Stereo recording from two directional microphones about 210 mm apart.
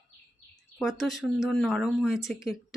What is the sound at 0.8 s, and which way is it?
Speech, centre (ahead or behind).